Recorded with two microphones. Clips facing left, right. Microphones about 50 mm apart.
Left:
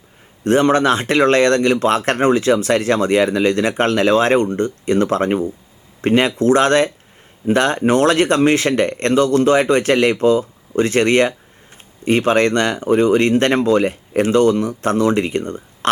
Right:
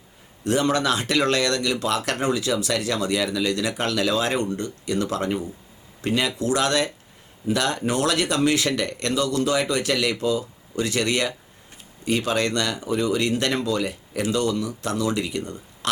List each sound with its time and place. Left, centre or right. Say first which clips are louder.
0.4 s speech: left 8 dB; left